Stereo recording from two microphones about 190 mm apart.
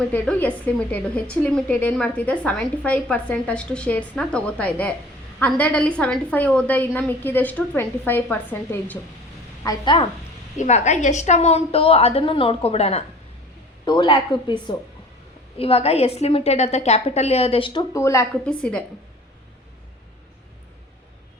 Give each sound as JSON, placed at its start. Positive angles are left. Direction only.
{"t": 0.1, "sound": "a woman's voice", "side_deg": 5}
{"t": 9.6, "sound": "speech", "side_deg": 25}
{"t": 10.6, "sound": "a woman's voice", "side_deg": 35}
{"t": 15.5, "sound": "a woman's voice", "side_deg": 30}
{"t": 17.9, "sound": "a woman's voice", "side_deg": 15}
{"t": 18.4, "sound": "a woman's voice", "side_deg": 5}